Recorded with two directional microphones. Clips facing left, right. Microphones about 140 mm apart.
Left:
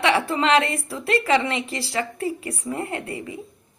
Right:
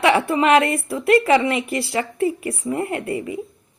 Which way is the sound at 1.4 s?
25° left (ahead or behind).